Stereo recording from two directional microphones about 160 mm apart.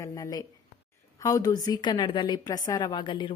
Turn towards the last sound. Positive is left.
turn(degrees=30)  # may be behind; listen again after turning